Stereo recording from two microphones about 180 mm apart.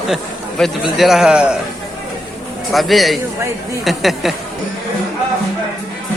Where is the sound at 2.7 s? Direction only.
Centre (ahead or behind).